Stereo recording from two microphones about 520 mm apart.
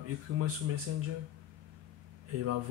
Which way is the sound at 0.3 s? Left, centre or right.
Right.